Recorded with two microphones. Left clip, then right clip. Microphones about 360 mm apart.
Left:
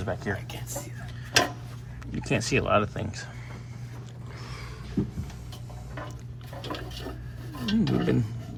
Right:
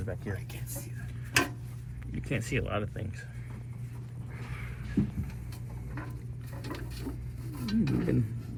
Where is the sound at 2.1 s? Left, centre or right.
Centre.